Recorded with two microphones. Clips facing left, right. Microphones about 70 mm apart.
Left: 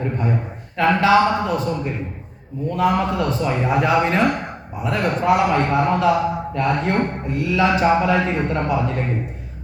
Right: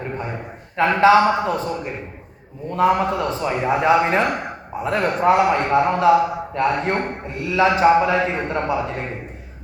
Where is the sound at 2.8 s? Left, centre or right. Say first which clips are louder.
Right 2 dB; right.